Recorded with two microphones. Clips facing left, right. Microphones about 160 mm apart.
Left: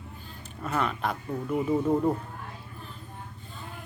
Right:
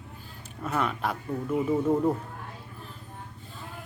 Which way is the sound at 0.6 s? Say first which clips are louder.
Even; 5° right (ahead or behind).